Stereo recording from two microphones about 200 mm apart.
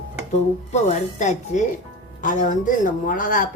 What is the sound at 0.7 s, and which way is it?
Speech, 35° left (ahead or behind).